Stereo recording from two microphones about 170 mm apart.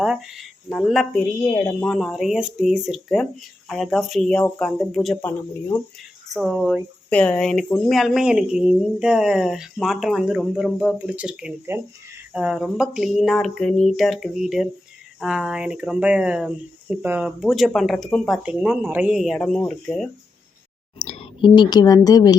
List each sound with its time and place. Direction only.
0.0 s speech: centre (ahead or behind); by 5.8 s 15° left (ahead or behind)
6.3 s speech: centre (ahead or behind)
21.0 s speech: 40° left (ahead or behind); by 22.4 s 20° left (ahead or behind)